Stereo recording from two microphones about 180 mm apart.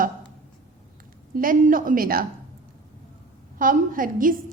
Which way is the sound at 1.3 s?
50° right (ahead or behind).